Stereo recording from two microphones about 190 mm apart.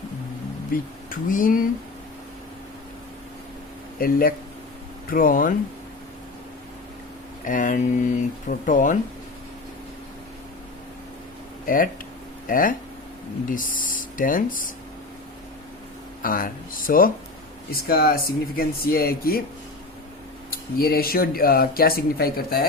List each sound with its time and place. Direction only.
0.7 s speech: 45° left (ahead or behind)
4.0 s speech: 50° left (ahead or behind)
7.4 s speech: 45° left (ahead or behind)
11.6 s speech: 45° left (ahead or behind)
16.2 s speech: 45° left (ahead or behind)
20.5 s speech: 50° left (ahead or behind)